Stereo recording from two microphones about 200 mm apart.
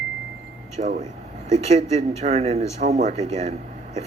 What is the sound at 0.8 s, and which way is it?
Speech, 35° right (ahead or behind).